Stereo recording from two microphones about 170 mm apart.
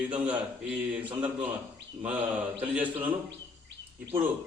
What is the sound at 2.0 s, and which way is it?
A man's voice, 10° right (ahead or behind).